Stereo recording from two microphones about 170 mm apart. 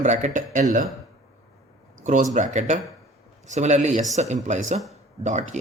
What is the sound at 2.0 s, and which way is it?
Speech, 45° right (ahead or behind).